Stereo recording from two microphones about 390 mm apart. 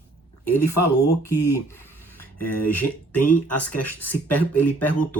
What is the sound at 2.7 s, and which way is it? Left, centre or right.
Speech, left.